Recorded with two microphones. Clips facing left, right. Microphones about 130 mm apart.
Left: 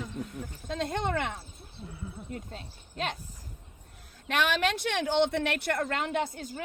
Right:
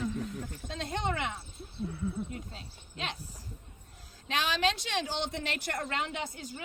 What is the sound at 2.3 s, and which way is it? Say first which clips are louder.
Speech: left 3 dB; 50° left (ahead or behind).